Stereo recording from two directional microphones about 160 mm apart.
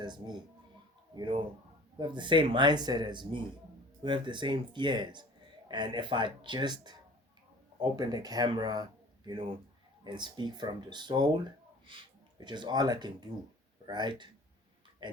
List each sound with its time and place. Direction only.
0.0 s speech: 25° right (ahead or behind)